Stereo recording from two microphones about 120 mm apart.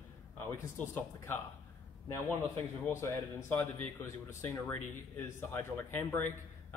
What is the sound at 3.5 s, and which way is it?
A man's voice, 20° left (ahead or behind).